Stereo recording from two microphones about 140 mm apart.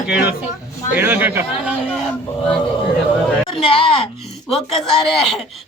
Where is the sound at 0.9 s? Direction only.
15° right (ahead or behind).